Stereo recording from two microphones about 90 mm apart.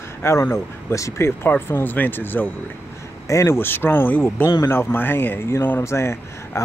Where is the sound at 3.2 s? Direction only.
35° left (ahead or behind).